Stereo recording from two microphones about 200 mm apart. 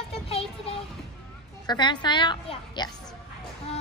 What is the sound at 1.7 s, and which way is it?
A woman's voice, 20° left (ahead or behind).